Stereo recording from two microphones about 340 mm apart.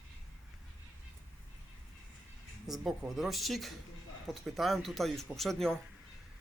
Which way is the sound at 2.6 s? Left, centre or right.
Centre.